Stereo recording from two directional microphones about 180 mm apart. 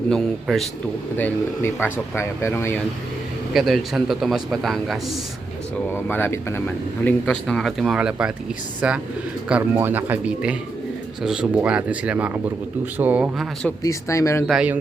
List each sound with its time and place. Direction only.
0.1 s speech: centre (ahead or behind)
1.1 s speech: 10° left (ahead or behind)
3.5 s speech: centre (ahead or behind)
13.8 s speech: 15° left (ahead or behind)
14.4 s speech: 5° right (ahead or behind)